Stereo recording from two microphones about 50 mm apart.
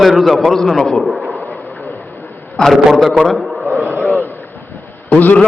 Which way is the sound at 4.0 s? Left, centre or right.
Left.